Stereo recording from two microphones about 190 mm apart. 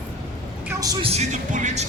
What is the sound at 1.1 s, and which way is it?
Speech, 40° right (ahead or behind).